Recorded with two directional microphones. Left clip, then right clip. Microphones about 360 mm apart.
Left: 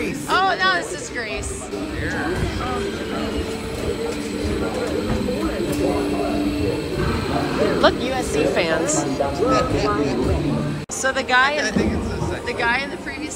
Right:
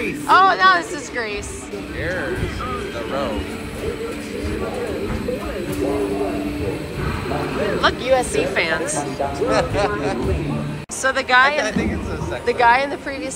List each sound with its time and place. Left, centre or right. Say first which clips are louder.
0.3 s a sound: right 6 dB; centre
7.8 s speech: right 5 dB; centre
9.5 s speech: right 2 dB; centre